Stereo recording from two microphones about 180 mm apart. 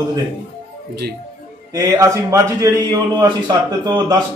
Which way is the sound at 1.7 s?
20° right (ahead or behind).